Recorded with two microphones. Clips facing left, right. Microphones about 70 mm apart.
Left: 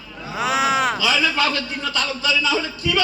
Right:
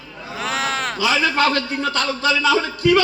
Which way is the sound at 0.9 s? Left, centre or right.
Right.